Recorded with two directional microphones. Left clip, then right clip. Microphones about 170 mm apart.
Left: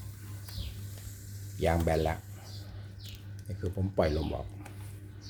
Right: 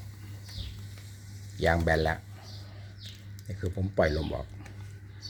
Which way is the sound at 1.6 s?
10° right (ahead or behind).